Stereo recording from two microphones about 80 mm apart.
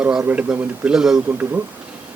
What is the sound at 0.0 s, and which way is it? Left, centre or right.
A man's voice, centre.